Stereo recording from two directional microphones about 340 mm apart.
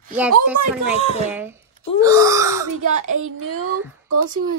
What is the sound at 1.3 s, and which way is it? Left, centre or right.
A child's voice, centre.